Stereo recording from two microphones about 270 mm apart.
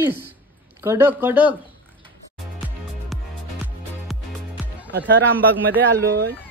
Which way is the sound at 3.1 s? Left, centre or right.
Centre.